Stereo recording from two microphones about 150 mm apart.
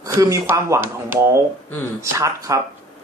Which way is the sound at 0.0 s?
20° right (ahead or behind).